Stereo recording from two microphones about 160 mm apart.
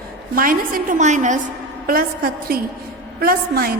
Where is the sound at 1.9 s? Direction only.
65° right (ahead or behind).